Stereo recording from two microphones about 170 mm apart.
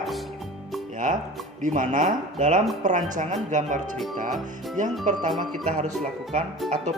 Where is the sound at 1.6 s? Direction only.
50° right (ahead or behind).